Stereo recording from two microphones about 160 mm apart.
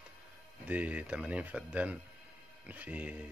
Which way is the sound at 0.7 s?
10° right (ahead or behind).